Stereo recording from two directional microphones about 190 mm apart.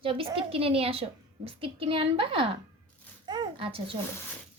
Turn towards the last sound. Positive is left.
turn(degrees=-30)  # may be behind; listen again after turning